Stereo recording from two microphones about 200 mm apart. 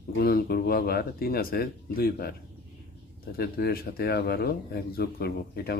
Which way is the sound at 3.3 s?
50° left (ahead or behind).